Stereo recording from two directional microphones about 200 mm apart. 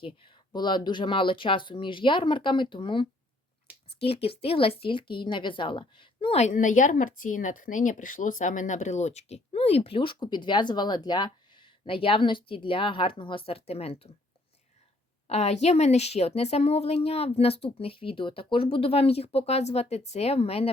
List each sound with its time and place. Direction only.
0.0 s a woman's voice: 25° left (ahead or behind)
15.3 s speech: 35° left (ahead or behind)